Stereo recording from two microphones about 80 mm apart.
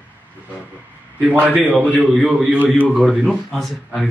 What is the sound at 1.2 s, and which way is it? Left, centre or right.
A man's voice, centre.